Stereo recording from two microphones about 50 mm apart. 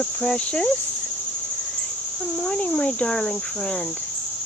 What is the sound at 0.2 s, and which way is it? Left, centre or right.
Speech, centre.